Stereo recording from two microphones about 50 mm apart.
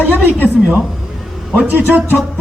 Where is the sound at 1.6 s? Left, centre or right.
Right.